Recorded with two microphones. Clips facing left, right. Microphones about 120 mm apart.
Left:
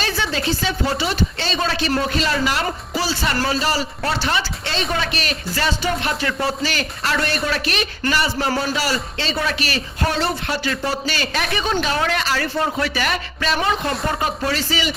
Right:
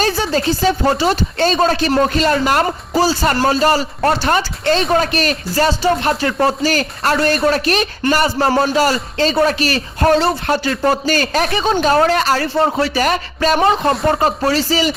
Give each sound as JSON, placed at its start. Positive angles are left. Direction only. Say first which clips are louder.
{"t": 0.0, "sound": "speech", "louder": "right 6 dB", "side_deg": -40}